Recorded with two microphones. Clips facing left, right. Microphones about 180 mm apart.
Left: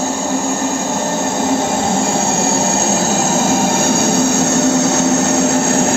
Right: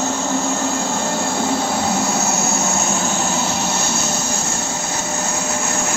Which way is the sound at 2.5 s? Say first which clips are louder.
Left 5 dB; 35° left (ahead or behind).